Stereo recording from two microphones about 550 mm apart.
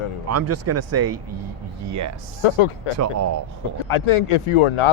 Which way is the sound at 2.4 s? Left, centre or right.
Left.